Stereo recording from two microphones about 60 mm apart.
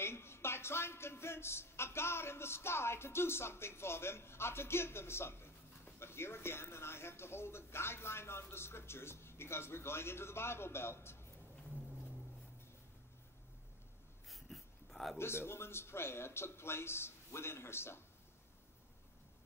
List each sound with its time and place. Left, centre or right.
0.0 s speech: left
14.3 s a sound: centre
15.1 s speech: left